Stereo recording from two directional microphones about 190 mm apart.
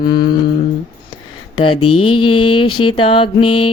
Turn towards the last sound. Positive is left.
turn(degrees=30)  # may be behind; listen again after turning